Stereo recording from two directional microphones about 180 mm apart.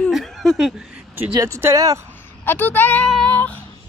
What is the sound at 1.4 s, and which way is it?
Speech, 15° right (ahead or behind).